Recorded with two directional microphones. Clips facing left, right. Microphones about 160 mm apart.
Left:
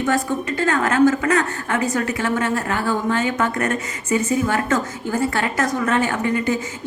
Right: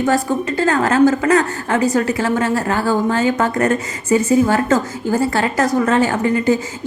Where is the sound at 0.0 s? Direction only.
35° right (ahead or behind).